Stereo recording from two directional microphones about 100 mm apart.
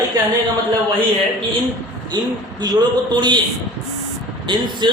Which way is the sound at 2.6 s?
45° right (ahead or behind).